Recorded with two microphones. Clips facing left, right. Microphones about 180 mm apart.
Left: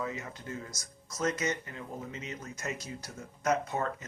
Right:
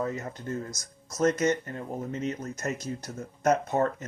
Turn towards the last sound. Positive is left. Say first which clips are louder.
# right 6 dB
turn(degrees=-45)  # may be behind; listen again after turning